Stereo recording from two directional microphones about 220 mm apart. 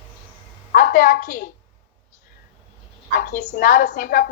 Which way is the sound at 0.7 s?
40° left (ahead or behind).